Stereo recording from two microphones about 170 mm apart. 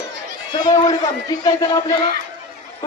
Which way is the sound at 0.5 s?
25° left (ahead or behind).